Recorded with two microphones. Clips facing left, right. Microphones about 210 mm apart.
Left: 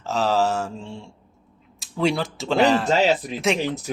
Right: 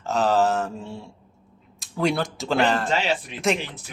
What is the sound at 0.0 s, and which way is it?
Speech, centre (ahead or behind).